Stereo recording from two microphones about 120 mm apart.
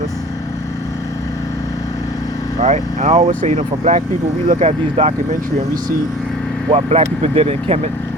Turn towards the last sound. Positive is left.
turn(degrees=-60)  # may be behind; listen again after turning